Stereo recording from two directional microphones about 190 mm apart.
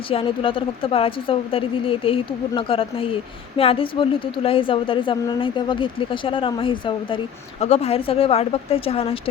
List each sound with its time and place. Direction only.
0.1 s a woman's voice: 30° left (ahead or behind)